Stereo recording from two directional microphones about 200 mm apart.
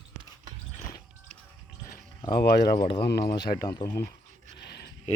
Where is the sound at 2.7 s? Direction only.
25° left (ahead or behind).